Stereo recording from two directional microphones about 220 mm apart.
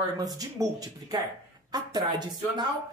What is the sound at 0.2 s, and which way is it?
Speech, 15° right (ahead or behind).